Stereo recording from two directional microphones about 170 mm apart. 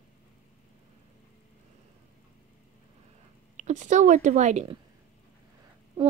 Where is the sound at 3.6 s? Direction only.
45° right (ahead or behind).